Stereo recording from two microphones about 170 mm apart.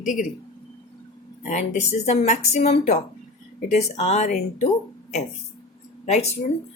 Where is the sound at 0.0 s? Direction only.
50° left (ahead or behind).